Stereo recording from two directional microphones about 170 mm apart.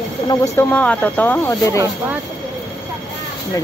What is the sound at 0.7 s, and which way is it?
Speech, 10° left (ahead or behind).